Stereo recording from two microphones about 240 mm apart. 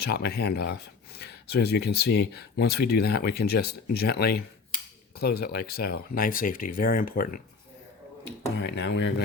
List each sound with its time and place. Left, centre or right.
0.0 s speech: left
8.5 s speech: left